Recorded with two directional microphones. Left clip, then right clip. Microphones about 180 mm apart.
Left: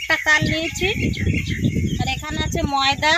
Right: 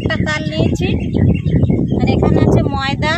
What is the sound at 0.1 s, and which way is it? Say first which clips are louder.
Speech: left 6 dB; centre (ahead or behind).